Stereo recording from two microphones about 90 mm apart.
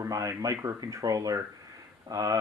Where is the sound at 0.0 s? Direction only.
35° right (ahead or behind).